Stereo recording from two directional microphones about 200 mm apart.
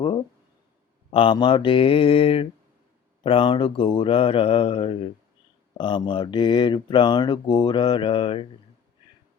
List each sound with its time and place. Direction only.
1.1 s speech: 25° left (ahead or behind)